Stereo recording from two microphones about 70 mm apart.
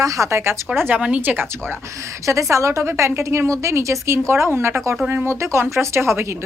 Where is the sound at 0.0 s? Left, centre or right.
Right.